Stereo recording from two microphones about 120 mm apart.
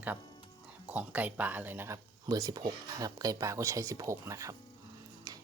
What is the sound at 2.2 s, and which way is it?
Speech, 35° right (ahead or behind).